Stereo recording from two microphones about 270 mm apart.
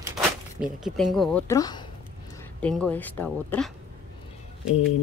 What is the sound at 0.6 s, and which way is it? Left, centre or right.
Speech, centre.